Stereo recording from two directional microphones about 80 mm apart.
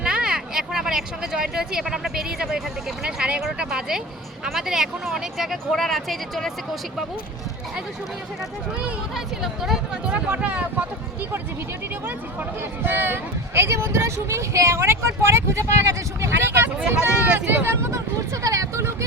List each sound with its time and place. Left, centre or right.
0.0 s speech: centre
9.1 s speech: centre; by 17.7 s right
17.9 s speech: right